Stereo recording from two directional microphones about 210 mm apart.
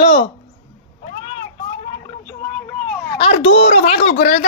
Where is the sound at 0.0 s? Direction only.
25° left (ahead or behind).